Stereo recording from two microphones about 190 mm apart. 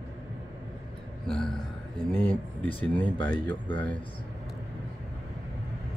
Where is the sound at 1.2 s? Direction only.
Centre (ahead or behind).